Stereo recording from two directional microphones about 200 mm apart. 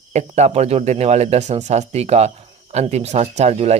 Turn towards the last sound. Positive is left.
turn(degrees=-35)  # may be behind; listen again after turning